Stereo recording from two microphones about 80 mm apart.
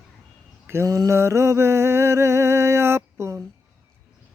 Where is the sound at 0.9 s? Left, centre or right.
Right.